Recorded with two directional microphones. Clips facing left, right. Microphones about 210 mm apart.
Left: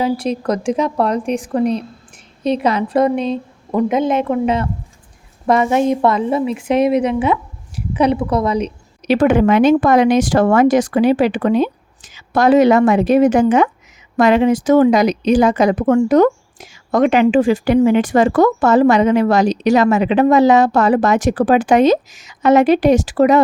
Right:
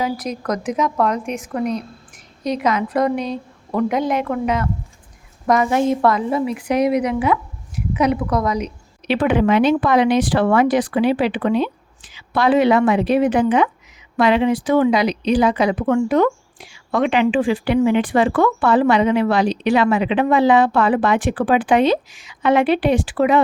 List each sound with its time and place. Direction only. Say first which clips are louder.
0.0 s a woman's voice: left 5 dB; 30° left (ahead or behind)
9.0 s speech: left 4 dB; 45° left (ahead or behind)